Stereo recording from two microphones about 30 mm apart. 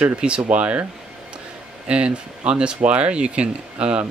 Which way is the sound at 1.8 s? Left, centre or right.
Right.